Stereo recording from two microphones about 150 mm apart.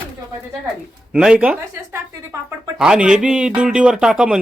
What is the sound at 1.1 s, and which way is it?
A woman's voice, 5° right (ahead or behind).